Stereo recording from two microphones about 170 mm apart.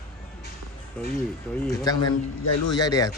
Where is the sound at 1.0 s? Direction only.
5° left (ahead or behind).